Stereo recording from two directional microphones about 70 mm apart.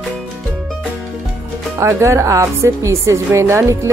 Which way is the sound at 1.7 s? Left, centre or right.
Right.